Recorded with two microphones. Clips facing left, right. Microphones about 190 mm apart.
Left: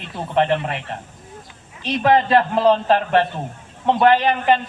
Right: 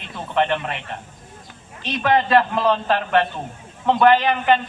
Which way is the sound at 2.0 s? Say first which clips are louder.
Left 1 dB; 30° left (ahead or behind).